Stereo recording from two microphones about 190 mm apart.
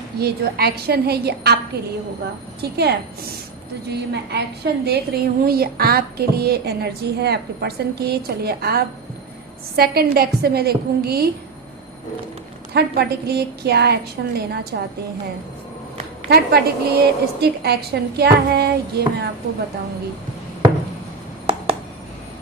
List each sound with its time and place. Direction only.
0.2 s a woman's voice: 55° right (ahead or behind)
12.7 s a woman's voice: 60° right (ahead or behind)
16.3 s a woman's voice: 55° right (ahead or behind)